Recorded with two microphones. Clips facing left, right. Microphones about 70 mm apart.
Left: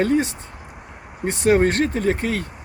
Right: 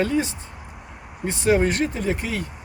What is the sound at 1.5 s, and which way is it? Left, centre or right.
Speech, left.